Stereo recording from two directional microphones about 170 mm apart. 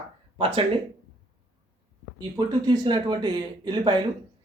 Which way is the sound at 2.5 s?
25° right (ahead or behind).